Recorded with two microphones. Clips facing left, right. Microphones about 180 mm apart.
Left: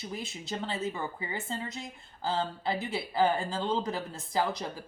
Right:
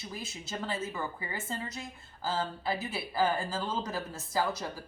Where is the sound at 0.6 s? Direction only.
20° left (ahead or behind).